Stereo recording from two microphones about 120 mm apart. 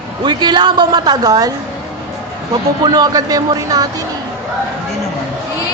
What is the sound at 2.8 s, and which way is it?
A woman's voice, 35° right (ahead or behind).